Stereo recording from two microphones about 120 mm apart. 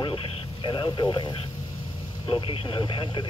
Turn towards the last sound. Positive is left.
turn(degrees=40)  # may be behind; listen again after turning